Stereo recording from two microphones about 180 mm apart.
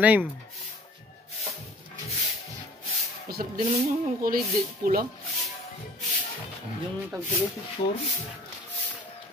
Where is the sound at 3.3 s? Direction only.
55° right (ahead or behind).